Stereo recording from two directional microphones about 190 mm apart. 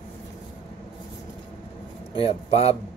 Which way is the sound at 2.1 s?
30° left (ahead or behind).